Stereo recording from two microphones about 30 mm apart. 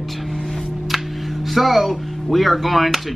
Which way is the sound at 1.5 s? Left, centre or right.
Centre.